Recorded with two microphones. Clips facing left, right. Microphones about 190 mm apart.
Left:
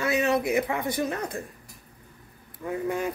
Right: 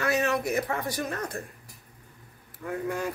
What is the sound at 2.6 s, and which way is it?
Speech, 20° left (ahead or behind).